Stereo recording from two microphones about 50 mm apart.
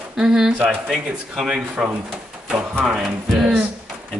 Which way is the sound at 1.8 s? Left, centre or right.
Centre.